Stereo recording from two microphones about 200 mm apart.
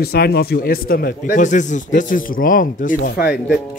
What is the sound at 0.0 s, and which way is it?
Speech, 50° left (ahead or behind).